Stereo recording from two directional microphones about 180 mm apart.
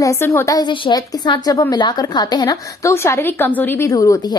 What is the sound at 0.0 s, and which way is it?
A woman's voice, 15° left (ahead or behind).